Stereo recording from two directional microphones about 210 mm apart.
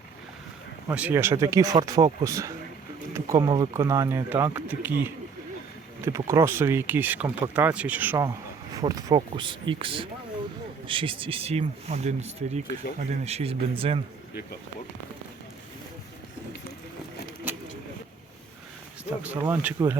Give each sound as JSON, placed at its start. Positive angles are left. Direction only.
{"t": 0.9, "sound": "speech", "side_deg": -10}
{"t": 17.5, "sound": "vehicle", "side_deg": -10}
{"t": 19.2, "sound": "speech", "side_deg": -5}